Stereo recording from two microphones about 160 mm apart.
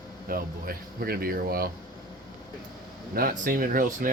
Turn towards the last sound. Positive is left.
turn(degrees=-60)  # may be behind; listen again after turning